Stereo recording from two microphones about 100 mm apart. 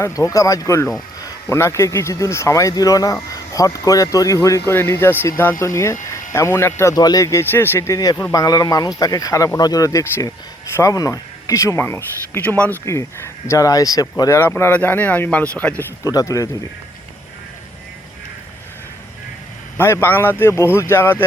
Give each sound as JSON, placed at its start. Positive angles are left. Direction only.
{"t": 0.0, "sound": "speech", "side_deg": 30}
{"t": 6.9, "sound": "speech", "side_deg": 40}
{"t": 7.5, "sound": "speech", "side_deg": 20}
{"t": 12.8, "sound": "speech", "side_deg": 30}
{"t": 14.3, "sound": "speech", "side_deg": 25}
{"t": 16.0, "sound": "speech", "side_deg": 35}
{"t": 19.7, "sound": "speech", "side_deg": 25}